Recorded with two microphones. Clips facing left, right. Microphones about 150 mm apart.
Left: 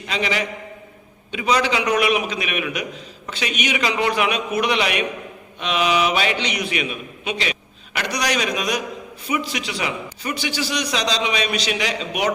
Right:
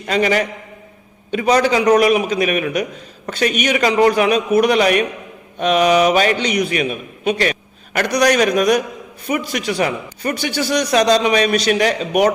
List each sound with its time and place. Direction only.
0.1 s a man's voice: 50° right (ahead or behind)